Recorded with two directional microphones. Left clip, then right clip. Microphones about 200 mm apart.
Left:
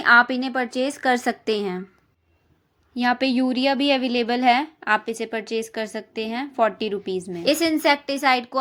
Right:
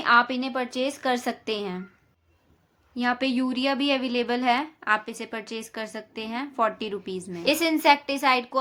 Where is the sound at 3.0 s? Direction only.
20° left (ahead or behind).